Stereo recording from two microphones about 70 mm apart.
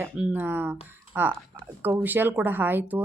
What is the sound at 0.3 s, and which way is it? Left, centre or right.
Speech, right.